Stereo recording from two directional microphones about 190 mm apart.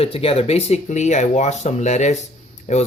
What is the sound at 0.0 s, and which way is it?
Speech, 30° left (ahead or behind).